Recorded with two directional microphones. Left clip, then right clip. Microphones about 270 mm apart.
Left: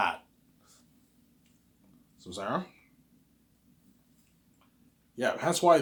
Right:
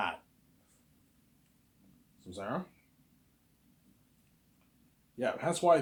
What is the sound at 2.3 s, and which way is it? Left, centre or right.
Speech, centre.